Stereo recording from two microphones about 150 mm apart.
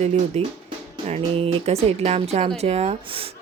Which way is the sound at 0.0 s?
45° right (ahead or behind).